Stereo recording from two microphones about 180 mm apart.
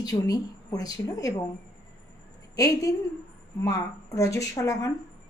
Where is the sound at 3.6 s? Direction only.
20° left (ahead or behind).